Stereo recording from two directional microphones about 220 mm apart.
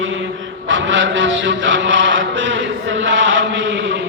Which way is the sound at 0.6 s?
60° right (ahead or behind).